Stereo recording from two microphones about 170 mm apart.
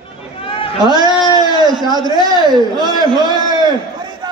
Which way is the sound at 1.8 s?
25° right (ahead or behind).